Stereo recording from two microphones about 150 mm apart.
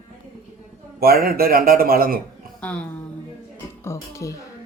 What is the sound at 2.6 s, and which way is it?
Speech, 5° left (ahead or behind).